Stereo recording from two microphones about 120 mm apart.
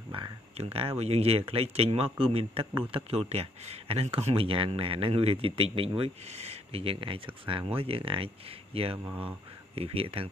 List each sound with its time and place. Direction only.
0.1 s a sound: 50° right (ahead or behind)
0.6 s speech: 50° right (ahead or behind)
8.9 s speech: 20° right (ahead or behind)
9.8 s speech: 55° right (ahead or behind)